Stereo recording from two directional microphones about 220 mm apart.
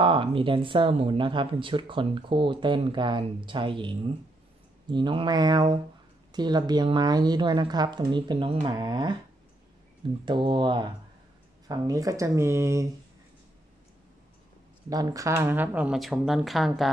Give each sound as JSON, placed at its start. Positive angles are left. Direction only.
{"t": 0.0, "sound": "speech", "side_deg": -25}
{"t": 10.2, "sound": "speech", "side_deg": -20}
{"t": 14.9, "sound": "speech", "side_deg": -15}